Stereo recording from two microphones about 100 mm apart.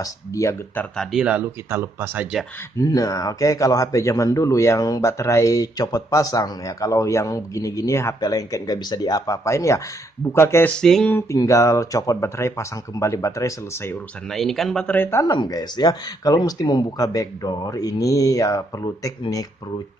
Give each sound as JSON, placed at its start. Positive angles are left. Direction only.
{"t": 0.0, "sound": "a man's voice", "side_deg": 30}
{"t": 1.1, "sound": "speech", "side_deg": -15}
{"t": 2.8, "sound": "a man's voice", "side_deg": 35}
{"t": 10.8, "sound": "speech", "side_deg": 5}
{"t": 11.1, "sound": "a man's voice", "side_deg": 30}
{"t": 14.3, "sound": "speech", "side_deg": 5}
{"t": 15.0, "sound": "speech", "side_deg": 25}
{"t": 15.2, "sound": "a man's voice", "side_deg": 40}